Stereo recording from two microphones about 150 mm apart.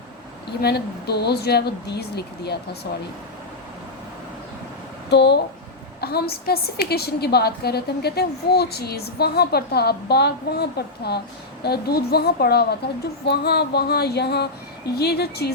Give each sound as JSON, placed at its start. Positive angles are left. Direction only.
{"t": 0.6, "sound": "a woman's voice", "side_deg": 90}
{"t": 5.1, "sound": "a woman's voice", "side_deg": 90}